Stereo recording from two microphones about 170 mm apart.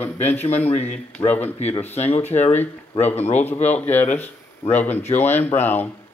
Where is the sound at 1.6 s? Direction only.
40° left (ahead or behind).